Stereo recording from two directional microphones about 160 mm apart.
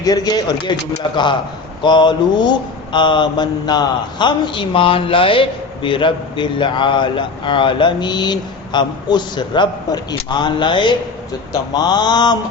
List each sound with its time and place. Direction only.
0.0 s mantra: 25° left (ahead or behind)